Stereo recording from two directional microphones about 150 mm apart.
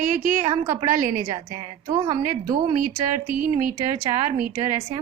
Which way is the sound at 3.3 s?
65° right (ahead or behind).